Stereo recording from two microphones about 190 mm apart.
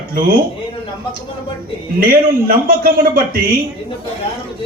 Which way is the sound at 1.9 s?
50° right (ahead or behind).